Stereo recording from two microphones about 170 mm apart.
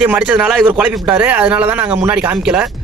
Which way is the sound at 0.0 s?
5° right (ahead or behind).